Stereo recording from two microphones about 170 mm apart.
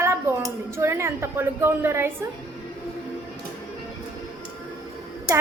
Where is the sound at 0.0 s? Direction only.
15° right (ahead or behind).